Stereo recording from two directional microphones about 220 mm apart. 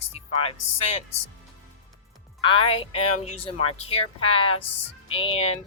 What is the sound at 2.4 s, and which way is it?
Speech, 25° left (ahead or behind).